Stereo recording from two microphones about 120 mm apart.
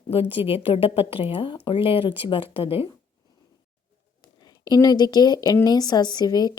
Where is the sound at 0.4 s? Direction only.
50° left (ahead or behind).